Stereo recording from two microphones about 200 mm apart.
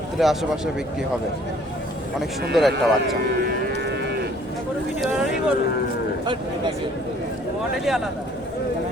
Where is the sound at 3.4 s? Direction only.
55° right (ahead or behind).